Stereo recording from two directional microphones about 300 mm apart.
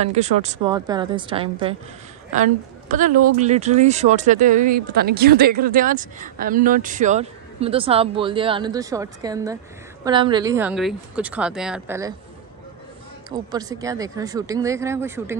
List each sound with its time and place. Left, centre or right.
0.0 s speech: right; by 12.1 s centre
13.3 s speech: centre